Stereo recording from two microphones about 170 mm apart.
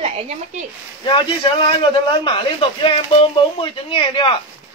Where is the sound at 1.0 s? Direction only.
30° left (ahead or behind).